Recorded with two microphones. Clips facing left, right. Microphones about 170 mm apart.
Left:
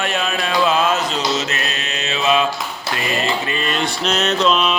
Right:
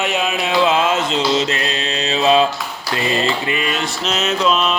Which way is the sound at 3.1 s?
20° right (ahead or behind).